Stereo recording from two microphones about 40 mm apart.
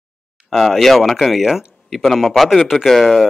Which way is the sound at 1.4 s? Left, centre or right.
Centre.